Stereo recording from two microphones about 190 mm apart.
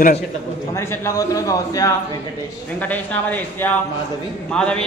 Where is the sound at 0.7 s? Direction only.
15° left (ahead or behind).